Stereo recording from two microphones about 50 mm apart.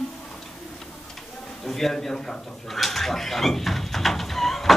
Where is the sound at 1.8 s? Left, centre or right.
Centre.